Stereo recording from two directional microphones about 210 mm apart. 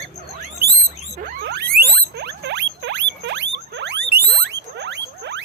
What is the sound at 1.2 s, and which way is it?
Rodents, 55° right (ahead or behind).